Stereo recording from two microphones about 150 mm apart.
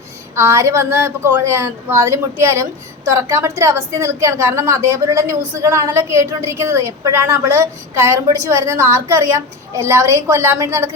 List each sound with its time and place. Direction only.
0.3 s a woman's voice: 20° right (ahead or behind)